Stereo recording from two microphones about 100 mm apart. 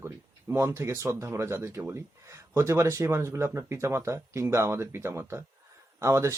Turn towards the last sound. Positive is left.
turn(degrees=-30)  # may be behind; listen again after turning